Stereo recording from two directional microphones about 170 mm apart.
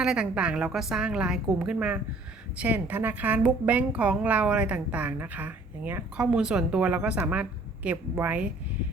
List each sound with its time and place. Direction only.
0.0 s a woman's voice: 5° right (ahead or behind)